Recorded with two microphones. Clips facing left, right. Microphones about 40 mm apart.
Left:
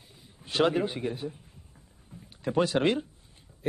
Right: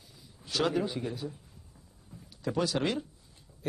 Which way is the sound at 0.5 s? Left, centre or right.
Left.